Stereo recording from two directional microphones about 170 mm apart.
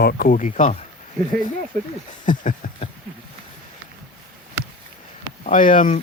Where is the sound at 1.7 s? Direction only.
55° right (ahead or behind).